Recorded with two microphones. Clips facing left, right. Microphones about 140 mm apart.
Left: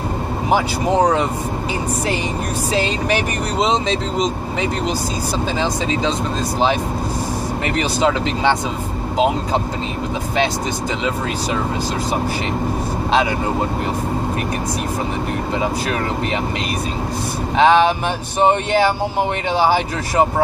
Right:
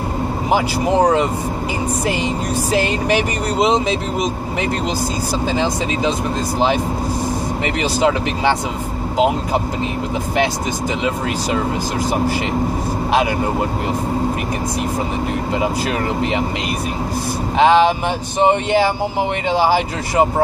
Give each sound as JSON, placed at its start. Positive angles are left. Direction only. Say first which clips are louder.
{"t": 3.1, "sound": "speech", "louder": "right 2 dB", "side_deg": -15}
{"t": 7.6, "sound": "speech", "louder": "right 1 dB", "side_deg": -15}
{"t": 17.6, "sound": "speech", "louder": "right 1 dB", "side_deg": -15}